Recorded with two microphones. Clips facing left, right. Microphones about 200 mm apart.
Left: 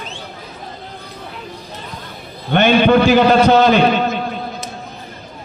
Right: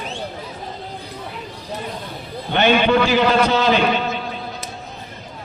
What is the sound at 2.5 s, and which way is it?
A man's voice, 50° left (ahead or behind).